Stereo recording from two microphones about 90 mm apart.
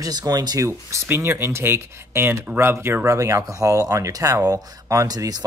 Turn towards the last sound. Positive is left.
turn(degrees=-40)  # may be behind; listen again after turning